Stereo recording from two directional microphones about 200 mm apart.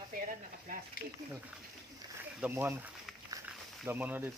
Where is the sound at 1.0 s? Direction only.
45° left (ahead or behind).